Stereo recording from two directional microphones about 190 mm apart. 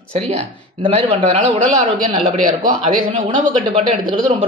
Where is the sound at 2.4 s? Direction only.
45° right (ahead or behind).